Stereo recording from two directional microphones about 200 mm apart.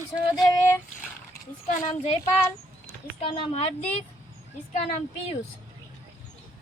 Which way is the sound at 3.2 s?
30° left (ahead or behind).